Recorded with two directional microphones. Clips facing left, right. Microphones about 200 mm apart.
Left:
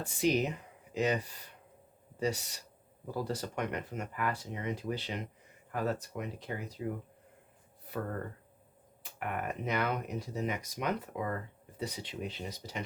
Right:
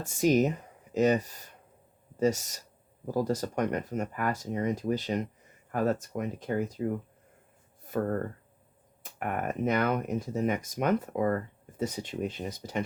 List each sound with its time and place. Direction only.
0.0 s speech: 45° right (ahead or behind)
7.9 s a sound: 45° right (ahead or behind)
9.1 s speech: 45° right (ahead or behind)